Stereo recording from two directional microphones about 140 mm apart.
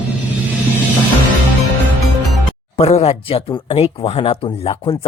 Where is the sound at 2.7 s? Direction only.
45° left (ahead or behind).